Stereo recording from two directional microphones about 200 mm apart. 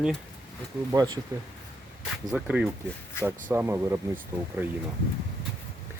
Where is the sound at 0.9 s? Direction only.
20° right (ahead or behind).